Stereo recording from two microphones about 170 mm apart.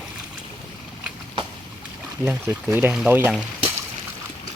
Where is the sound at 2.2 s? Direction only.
10° right (ahead or behind).